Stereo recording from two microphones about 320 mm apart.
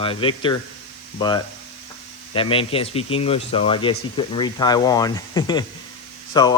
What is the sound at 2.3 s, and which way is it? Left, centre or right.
Speech, centre.